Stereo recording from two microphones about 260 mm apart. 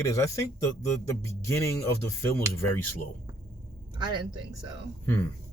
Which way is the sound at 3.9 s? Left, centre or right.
Centre.